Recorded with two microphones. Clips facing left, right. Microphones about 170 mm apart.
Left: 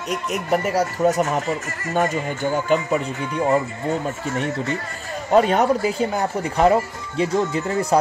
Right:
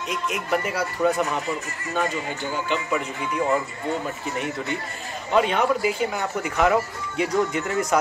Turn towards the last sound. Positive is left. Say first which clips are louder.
# left 3 dB
turn(degrees=30)  # may be behind; listen again after turning